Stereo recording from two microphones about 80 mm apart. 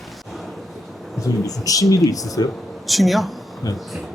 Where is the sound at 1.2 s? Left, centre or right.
Left.